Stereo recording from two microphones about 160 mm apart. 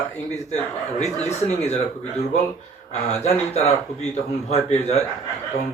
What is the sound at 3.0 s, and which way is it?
Speech, 45° left (ahead or behind).